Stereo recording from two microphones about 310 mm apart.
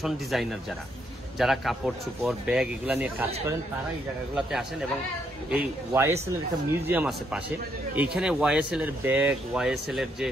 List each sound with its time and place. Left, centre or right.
0.0 s speech: centre
3.3 s speech: centre
4.4 s a man's voice: centre